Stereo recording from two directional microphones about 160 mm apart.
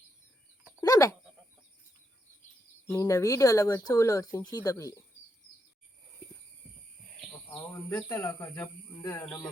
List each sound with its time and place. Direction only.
0.8 s goat: 20° left (ahead or behind)
2.8 s speech: 20° left (ahead or behind)
7.6 s speech: 15° left (ahead or behind)